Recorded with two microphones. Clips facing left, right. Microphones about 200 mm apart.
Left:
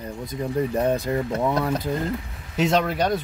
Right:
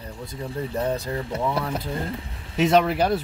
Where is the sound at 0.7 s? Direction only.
25° left (ahead or behind).